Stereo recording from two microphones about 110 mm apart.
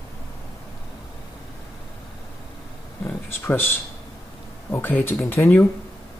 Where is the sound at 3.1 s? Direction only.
20° left (ahead or behind).